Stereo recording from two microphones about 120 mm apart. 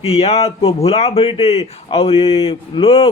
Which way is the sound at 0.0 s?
60° left (ahead or behind).